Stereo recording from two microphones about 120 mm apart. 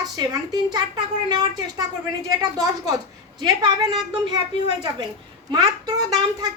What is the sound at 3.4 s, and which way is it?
Speech, 35° right (ahead or behind).